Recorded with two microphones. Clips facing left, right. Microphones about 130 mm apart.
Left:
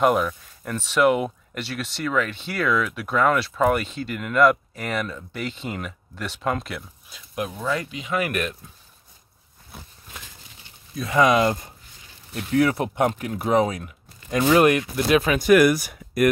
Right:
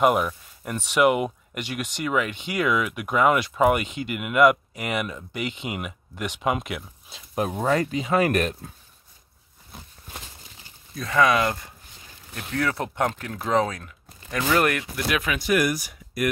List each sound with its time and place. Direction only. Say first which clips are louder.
0.0 s speech: left 1 dB; 5° right (ahead or behind)
7.1 s speech: right 3 dB; 25° right (ahead or behind)
7.4 s speech: right 4 dB; 45° right (ahead or behind)
11.1 s speech: left 2 dB; 20° left (ahead or behind)
12.5 s speech: left 5 dB; 15° left (ahead or behind)
15.3 s speech: left 7 dB; 60° left (ahead or behind)